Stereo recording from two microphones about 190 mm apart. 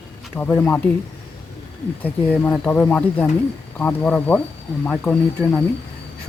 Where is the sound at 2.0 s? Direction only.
10° left (ahead or behind).